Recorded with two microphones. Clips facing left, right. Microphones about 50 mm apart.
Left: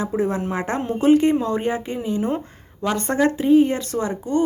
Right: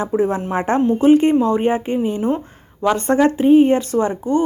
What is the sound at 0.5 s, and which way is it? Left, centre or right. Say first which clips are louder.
Speech: right 6 dB; right.